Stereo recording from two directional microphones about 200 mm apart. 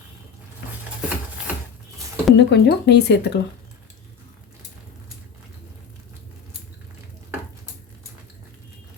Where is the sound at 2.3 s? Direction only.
60° left (ahead or behind).